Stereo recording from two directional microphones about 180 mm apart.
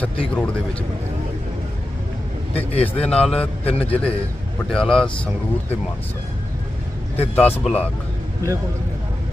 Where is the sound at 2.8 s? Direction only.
5° left (ahead or behind).